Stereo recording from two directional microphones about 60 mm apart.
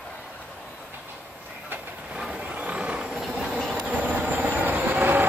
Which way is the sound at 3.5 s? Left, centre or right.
Centre.